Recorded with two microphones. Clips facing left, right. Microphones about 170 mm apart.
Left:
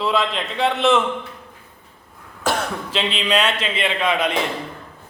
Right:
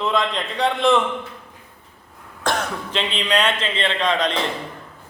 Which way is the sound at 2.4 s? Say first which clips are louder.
Left 1 dB; 5° left (ahead or behind).